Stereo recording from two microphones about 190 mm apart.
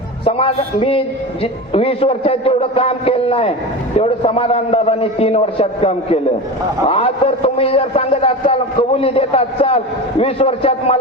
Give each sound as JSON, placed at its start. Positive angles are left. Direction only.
{"t": 0.3, "sound": "a man's voice", "side_deg": 30}